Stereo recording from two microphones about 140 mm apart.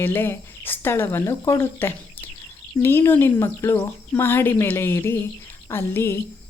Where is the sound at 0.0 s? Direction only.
15° left (ahead or behind).